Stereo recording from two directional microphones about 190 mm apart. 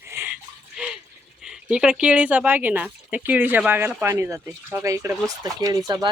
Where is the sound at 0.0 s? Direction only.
10° right (ahead or behind).